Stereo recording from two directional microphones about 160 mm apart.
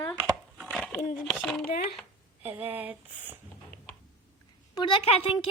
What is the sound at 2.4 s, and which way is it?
Speech, 10° right (ahead or behind).